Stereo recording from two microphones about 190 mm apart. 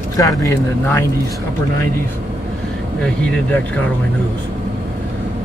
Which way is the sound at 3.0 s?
5° left (ahead or behind).